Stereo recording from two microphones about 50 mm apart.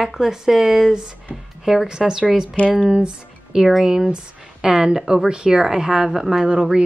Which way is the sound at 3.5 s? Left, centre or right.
Centre.